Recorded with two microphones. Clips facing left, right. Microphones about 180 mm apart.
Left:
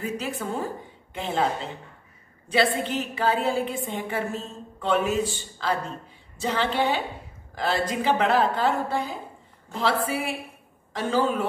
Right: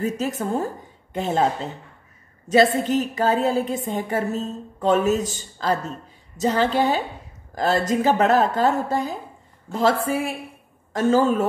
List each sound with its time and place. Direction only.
0.0 s a woman's voice: 45° right (ahead or behind)
6.3 s a sound: 40° right (ahead or behind)
7.5 s a woman's voice: 45° right (ahead or behind)